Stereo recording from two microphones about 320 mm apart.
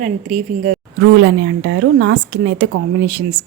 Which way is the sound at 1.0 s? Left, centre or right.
Right.